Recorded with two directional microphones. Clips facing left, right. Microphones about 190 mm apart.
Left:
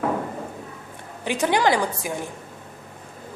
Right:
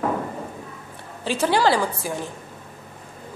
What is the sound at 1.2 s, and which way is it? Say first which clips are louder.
Speech: right 1 dB; 15° left (ahead or behind).